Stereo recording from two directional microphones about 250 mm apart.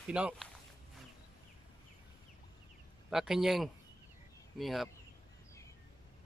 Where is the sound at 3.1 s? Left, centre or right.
Centre.